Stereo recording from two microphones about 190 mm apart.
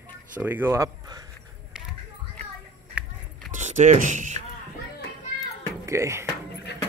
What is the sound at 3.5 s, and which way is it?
Speech, 40° right (ahead or behind).